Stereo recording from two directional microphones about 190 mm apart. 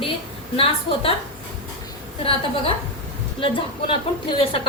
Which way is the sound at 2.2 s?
30° left (ahead or behind).